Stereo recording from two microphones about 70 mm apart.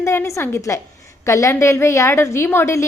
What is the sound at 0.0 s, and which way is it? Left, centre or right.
A woman's voice, left.